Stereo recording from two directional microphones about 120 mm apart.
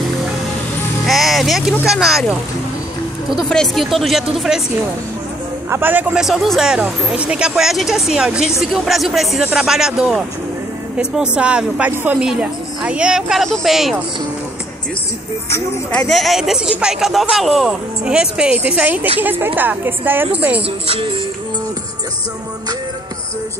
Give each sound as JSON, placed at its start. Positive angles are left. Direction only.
{"t": 1.0, "sound": "music", "side_deg": 0}
{"t": 1.9, "sound": "speech", "side_deg": -5}
{"t": 3.4, "sound": "speech", "side_deg": 5}
{"t": 5.7, "sound": "a woman's voice", "side_deg": -15}
{"t": 6.2, "sound": "a woman's voice", "side_deg": 0}
{"t": 15.9, "sound": "a woman's voice", "side_deg": 5}
{"t": 20.8, "sound": "music", "side_deg": -55}